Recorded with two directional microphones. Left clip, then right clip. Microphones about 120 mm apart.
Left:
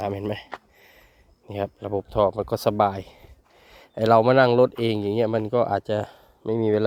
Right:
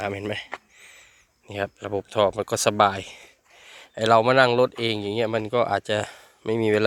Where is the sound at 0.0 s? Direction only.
30° left (ahead or behind).